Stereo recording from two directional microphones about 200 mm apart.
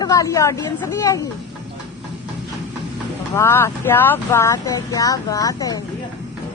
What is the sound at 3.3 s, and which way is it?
Speech, 10° left (ahead or behind).